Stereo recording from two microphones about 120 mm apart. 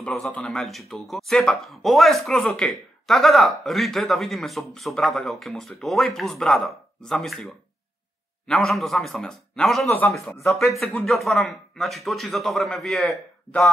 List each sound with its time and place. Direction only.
0.0 s speech: 5° left (ahead or behind)
9.8 s a man's voice: 20° left (ahead or behind)
10.4 s speech: centre (ahead or behind)